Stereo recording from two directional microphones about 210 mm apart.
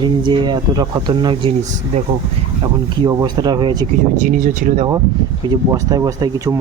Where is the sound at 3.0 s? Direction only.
20° right (ahead or behind).